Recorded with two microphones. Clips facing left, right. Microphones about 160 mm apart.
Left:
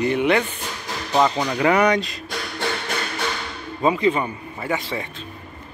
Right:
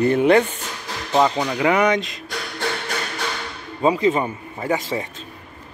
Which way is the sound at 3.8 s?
35° right (ahead or behind).